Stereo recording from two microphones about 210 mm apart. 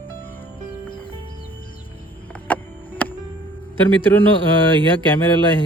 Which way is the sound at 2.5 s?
10° left (ahead or behind).